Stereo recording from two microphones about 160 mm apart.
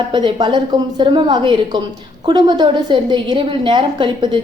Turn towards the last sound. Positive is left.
turn(degrees=-30)  # may be behind; listen again after turning